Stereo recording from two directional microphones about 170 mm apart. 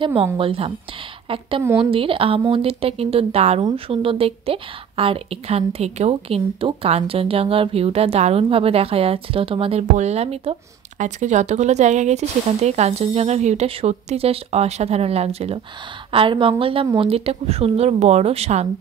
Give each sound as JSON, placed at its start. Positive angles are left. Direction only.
{"t": 0.0, "sound": "a woman's voice", "side_deg": -30}
{"t": 1.8, "sound": "a woman's voice", "side_deg": -30}